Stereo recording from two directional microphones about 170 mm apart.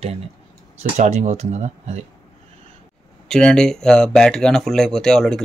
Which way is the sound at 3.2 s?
5° left (ahead or behind).